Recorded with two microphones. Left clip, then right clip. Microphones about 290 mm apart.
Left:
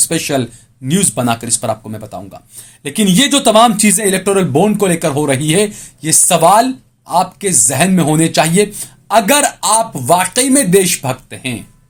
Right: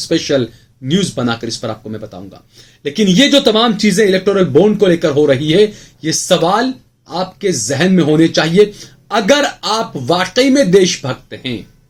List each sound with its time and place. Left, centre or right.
0.1 s speech: left